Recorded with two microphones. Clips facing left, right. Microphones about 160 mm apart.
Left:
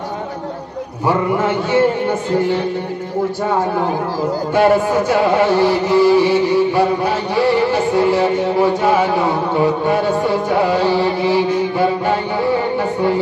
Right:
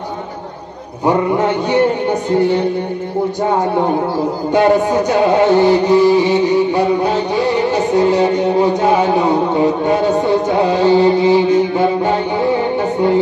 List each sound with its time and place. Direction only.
1.0 s music: 20° right (ahead or behind)
4.6 s music: 20° right (ahead or behind)